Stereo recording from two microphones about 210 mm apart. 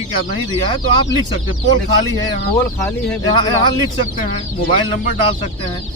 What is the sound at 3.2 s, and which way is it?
Speech, 20° left (ahead or behind).